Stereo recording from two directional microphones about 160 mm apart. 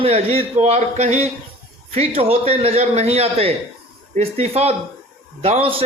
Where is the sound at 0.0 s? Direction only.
40° right (ahead or behind).